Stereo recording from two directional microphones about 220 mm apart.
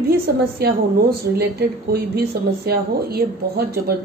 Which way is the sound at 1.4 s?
45° right (ahead or behind).